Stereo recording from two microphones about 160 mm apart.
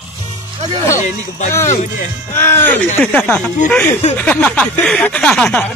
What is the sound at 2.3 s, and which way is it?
Speech, 15° left (ahead or behind).